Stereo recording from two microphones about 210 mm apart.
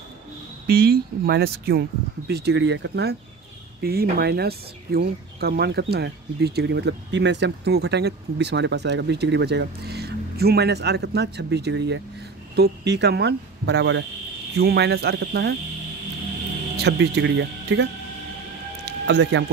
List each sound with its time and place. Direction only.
0.7 s speech: 50° right (ahead or behind)
16.7 s speech: 50° right (ahead or behind)
18.9 s speech: 55° right (ahead or behind)